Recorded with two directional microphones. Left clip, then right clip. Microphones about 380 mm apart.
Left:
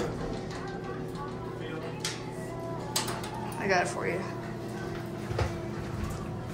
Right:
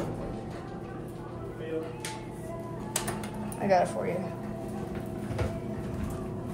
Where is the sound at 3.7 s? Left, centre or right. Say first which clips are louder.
Right 3 dB; centre.